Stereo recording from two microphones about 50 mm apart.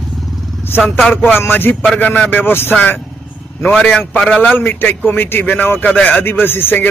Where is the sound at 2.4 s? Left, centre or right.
Left.